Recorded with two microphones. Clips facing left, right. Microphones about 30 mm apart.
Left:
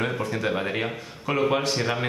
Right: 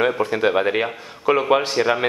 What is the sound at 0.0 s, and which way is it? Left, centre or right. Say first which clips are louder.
Speech: right 8 dB; right.